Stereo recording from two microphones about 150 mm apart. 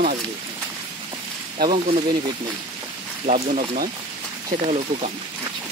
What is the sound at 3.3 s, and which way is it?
Speech, 50° right (ahead or behind).